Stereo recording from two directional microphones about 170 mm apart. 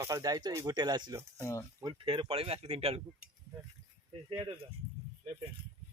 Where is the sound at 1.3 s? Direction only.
15° left (ahead or behind).